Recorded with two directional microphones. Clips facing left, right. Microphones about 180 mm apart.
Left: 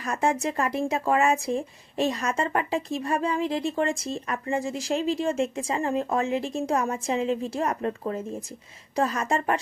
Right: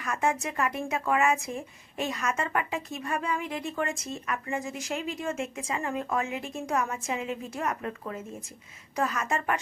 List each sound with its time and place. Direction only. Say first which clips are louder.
0.0 s speech: left 3 dB; 30° left (ahead or behind)